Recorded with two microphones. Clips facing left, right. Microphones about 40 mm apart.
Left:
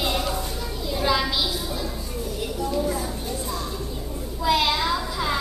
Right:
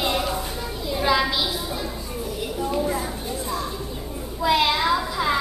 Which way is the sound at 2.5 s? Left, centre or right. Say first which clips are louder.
Right 1 dB; right.